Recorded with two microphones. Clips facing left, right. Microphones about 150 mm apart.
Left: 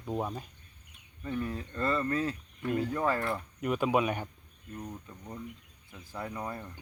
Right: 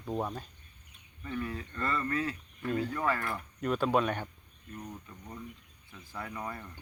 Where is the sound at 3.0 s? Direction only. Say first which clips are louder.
Left 2 dB; 25° left (ahead or behind).